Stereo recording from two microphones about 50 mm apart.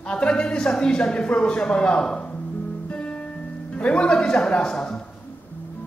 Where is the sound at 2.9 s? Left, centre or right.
Left.